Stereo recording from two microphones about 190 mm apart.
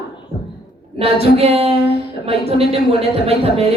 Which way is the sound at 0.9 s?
30° right (ahead or behind).